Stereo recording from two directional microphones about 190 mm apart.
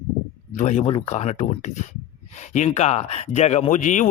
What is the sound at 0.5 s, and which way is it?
A man's voice, 40° left (ahead or behind).